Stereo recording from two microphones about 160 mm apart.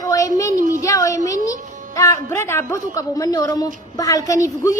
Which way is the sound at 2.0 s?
15° left (ahead or behind).